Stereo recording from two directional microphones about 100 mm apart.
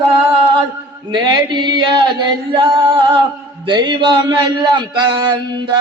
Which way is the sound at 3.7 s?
50° right (ahead or behind).